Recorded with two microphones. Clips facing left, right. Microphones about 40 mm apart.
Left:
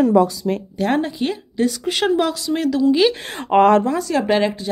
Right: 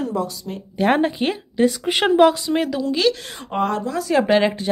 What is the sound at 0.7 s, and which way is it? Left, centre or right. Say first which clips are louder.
Speech: right 5 dB; right.